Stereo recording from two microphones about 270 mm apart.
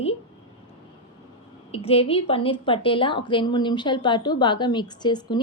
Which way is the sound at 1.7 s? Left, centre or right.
Left.